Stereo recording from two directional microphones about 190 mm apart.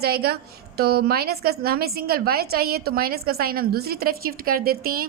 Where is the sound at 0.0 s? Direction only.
55° right (ahead or behind).